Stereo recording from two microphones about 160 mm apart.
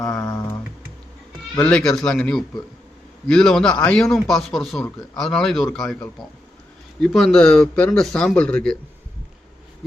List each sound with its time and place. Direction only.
0.1 s a sound: 20° left (ahead or behind)
1.5 s speech: 5° left (ahead or behind)
7.0 s speech: centre (ahead or behind)